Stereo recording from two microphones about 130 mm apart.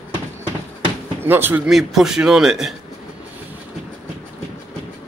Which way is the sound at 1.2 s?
15° right (ahead or behind).